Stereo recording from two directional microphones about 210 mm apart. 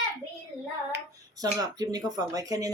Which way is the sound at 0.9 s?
15° right (ahead or behind).